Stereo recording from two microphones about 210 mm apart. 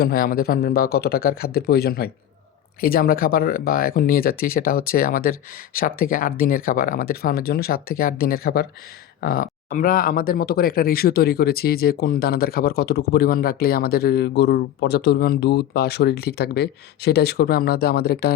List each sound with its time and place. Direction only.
0.0 s speech: 45° left (ahead or behind)